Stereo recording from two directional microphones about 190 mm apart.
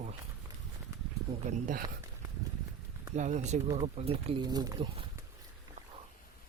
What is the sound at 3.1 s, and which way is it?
Speech, 40° right (ahead or behind).